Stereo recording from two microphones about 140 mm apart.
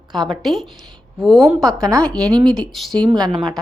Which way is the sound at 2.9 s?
30° right (ahead or behind).